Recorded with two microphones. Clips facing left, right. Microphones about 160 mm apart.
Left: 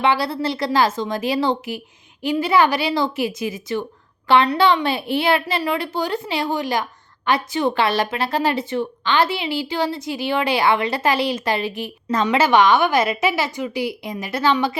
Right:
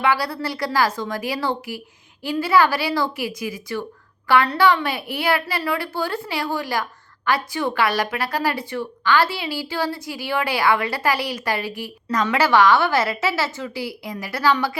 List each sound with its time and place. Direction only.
0.0 s a woman's voice: 25° left (ahead or behind)